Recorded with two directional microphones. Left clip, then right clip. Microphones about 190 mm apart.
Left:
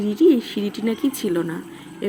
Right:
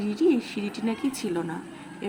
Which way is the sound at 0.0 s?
15° left (ahead or behind).